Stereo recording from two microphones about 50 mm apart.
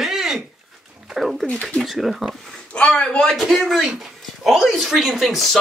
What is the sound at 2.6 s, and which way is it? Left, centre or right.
Speech, left.